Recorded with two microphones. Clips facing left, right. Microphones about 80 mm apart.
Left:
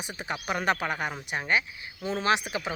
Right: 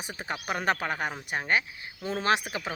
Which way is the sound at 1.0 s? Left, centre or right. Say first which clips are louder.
Even; right.